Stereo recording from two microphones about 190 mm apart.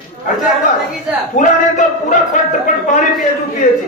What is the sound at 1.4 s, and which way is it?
A man's voice, 40° left (ahead or behind).